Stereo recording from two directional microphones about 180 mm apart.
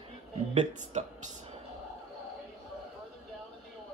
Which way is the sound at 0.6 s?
40° right (ahead or behind).